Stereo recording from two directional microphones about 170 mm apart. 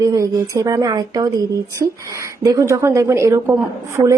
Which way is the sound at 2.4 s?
20° right (ahead or behind).